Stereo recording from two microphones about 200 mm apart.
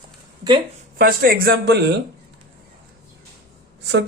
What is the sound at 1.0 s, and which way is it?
Speech, 45° right (ahead or behind).